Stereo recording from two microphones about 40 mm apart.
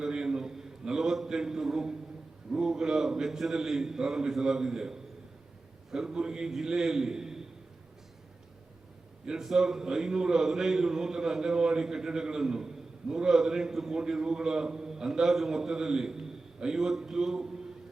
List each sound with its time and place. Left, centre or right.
0.0 s a sound: centre
2.5 s a man's voice: centre
6.1 s a man's voice: centre
9.2 s a man's voice: centre